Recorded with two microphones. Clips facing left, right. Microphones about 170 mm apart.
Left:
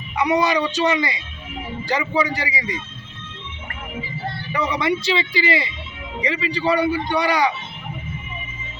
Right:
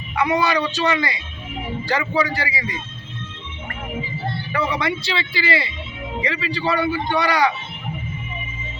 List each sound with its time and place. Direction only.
0.2 s speech: 15° left (ahead or behind)
4.5 s speech: 20° left (ahead or behind)